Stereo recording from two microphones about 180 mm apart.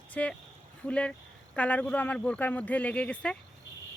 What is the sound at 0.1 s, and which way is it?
Speech, 5° left (ahead or behind).